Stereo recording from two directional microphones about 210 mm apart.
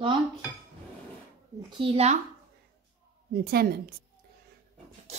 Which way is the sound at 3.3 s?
50° right (ahead or behind).